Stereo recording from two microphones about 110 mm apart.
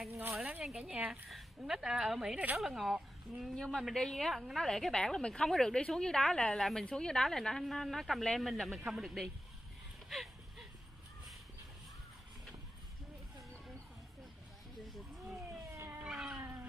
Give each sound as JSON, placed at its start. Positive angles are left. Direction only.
{"t": 0.4, "sound": "speech", "side_deg": -15}
{"t": 15.7, "sound": "cat", "side_deg": -25}
{"t": 16.0, "sound": "cat", "side_deg": -5}
{"t": 16.3, "sound": "cat", "side_deg": -20}